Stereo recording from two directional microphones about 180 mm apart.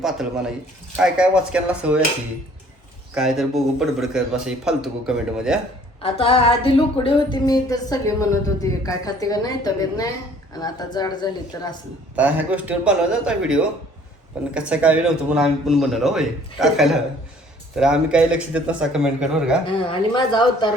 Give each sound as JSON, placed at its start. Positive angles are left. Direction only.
{"t": 0.0, "sound": "a man's voice", "side_deg": 0}
{"t": 3.2, "sound": "a man's voice", "side_deg": 0}
{"t": 6.0, "sound": "speech", "side_deg": 30}
{"t": 12.1, "sound": "a man's voice", "side_deg": -10}
{"t": 19.6, "sound": "speech", "side_deg": 30}